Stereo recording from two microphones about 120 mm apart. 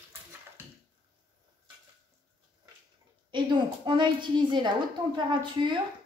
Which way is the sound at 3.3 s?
40° right (ahead or behind).